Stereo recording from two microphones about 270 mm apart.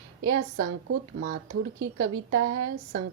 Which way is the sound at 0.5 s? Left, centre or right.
Right.